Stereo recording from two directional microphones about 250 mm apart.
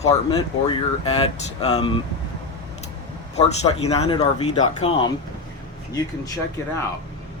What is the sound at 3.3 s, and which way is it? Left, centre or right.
Speech, left.